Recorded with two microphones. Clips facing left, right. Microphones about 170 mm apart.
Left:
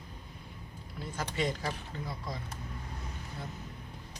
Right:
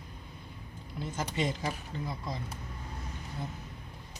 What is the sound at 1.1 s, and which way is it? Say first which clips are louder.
Speech: even; 20° right (ahead or behind).